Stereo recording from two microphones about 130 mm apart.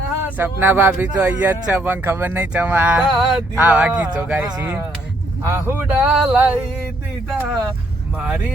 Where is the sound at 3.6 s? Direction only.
10° right (ahead or behind).